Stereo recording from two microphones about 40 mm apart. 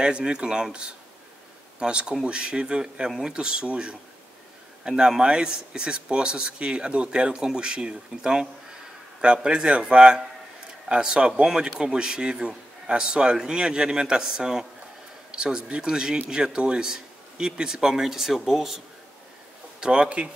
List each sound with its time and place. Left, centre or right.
0.0 s a man's voice: right; by 18.8 s centre
19.8 s speech: right